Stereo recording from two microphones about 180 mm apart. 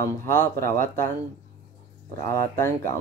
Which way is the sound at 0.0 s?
15° left (ahead or behind).